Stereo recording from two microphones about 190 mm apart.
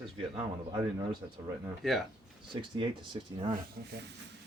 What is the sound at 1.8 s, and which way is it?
Speech, centre (ahead or behind).